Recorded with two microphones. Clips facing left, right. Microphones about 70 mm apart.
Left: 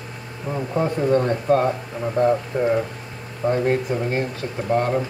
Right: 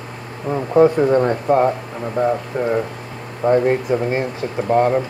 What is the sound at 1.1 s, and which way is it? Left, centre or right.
Speech, centre.